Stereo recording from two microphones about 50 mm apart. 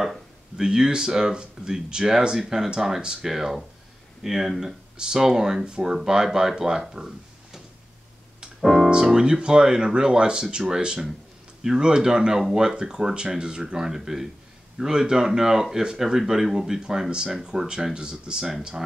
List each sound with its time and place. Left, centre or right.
0.6 s speech: centre
8.4 s piano: centre
9.0 s speech: centre
11.6 s speech: centre